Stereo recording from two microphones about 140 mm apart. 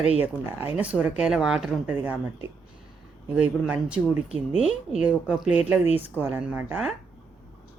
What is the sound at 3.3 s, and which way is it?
Speech, 10° right (ahead or behind).